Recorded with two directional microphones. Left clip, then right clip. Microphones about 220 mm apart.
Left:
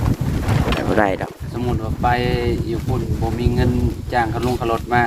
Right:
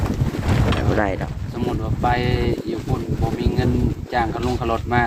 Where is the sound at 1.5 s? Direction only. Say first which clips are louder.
Left 1 dB; 15° right (ahead or behind).